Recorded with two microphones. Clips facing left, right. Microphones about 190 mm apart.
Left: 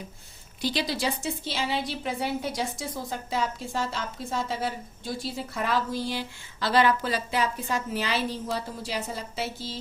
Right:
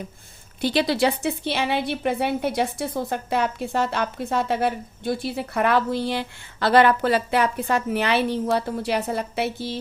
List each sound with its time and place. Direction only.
0.6 s a woman's voice: 60° right (ahead or behind)